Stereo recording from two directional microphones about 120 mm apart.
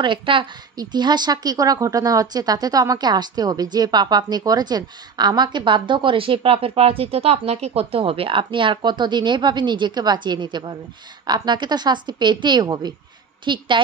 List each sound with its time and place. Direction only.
0.0 s a woman's voice: 45° right (ahead or behind)